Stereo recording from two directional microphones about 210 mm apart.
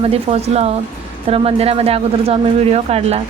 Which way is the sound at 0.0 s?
30° right (ahead or behind).